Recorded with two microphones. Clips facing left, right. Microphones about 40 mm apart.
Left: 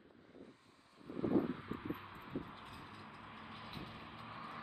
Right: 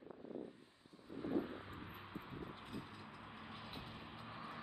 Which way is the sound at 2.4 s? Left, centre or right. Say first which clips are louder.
Right 1 dB; centre.